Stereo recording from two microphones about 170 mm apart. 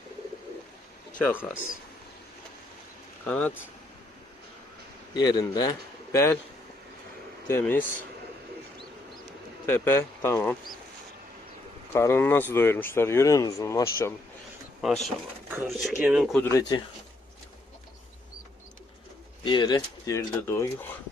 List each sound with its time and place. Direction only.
1.2 s speech: 10° left (ahead or behind)
3.2 s speech: 10° left (ahead or behind)
5.1 s a man's voice: 20° left (ahead or behind)
7.6 s speech: 10° left (ahead or behind)
9.6 s speech: 10° left (ahead or behind)
11.9 s speech: 15° left (ahead or behind)
14.8 s speech: centre (ahead or behind)
15.4 s speech: 15° right (ahead or behind)
16.4 s speech: 20° left (ahead or behind)
19.5 s speech: 25° left (ahead or behind)